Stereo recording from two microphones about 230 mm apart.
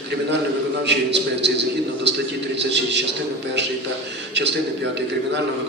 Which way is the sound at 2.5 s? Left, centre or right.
Right.